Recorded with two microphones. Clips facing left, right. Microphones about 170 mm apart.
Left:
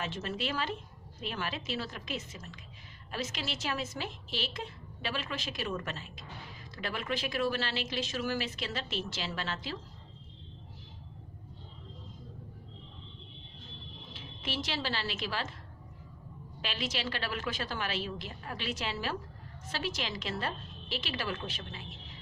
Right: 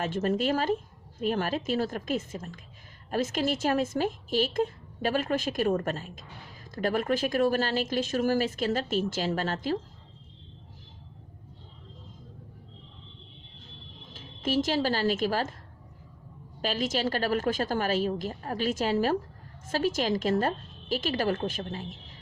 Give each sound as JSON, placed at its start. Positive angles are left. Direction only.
{"t": 0.0, "sound": "a woman's voice", "side_deg": -50}
{"t": 14.1, "sound": "speech", "side_deg": -45}
{"t": 16.6, "sound": "a woman's voice", "side_deg": -45}